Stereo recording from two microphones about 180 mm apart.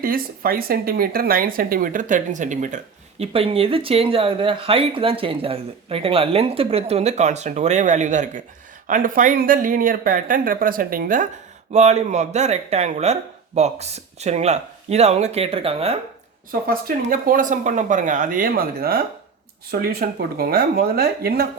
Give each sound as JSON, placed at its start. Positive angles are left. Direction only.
{"t": 0.0, "sound": "speech", "side_deg": -55}
{"t": 3.3, "sound": "speech", "side_deg": -30}
{"t": 11.7, "sound": "speech", "side_deg": -40}
{"t": 16.5, "sound": "speech", "side_deg": -55}